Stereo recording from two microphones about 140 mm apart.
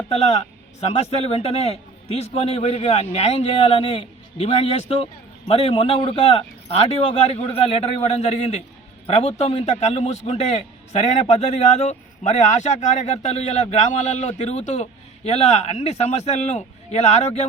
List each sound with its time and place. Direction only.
0.1 s a man's voice: 50° left (ahead or behind)